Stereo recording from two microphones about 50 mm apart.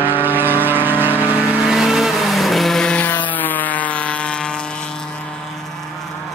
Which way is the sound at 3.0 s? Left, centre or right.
Left.